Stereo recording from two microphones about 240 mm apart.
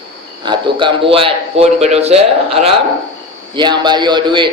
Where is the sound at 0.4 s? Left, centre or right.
Centre.